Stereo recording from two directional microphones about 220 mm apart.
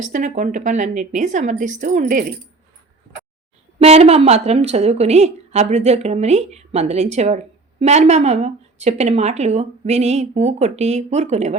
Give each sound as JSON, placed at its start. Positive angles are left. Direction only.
{"t": 0.1, "sound": "a woman's voice", "side_deg": -35}
{"t": 3.8, "sound": "a woman's voice", "side_deg": -30}